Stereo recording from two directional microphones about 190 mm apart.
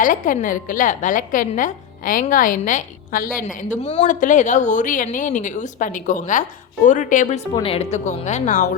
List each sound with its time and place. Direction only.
0.0 s a woman's voice: 45° left (ahead or behind)
7.5 s speech: 30° left (ahead or behind)